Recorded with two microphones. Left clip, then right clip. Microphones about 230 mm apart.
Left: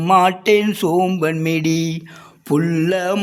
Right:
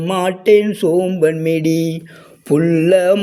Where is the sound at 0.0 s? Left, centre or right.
Centre.